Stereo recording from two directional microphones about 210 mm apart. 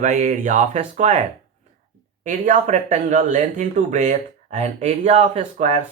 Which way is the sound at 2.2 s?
40° right (ahead or behind).